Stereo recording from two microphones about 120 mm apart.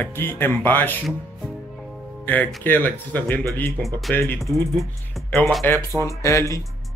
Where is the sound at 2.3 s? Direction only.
15° left (ahead or behind).